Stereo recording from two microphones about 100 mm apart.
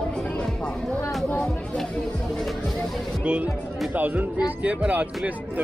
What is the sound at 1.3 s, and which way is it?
Music, 10° left (ahead or behind).